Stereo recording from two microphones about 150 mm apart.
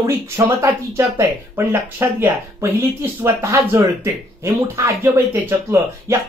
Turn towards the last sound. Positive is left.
turn(degrees=-20)  # may be behind; listen again after turning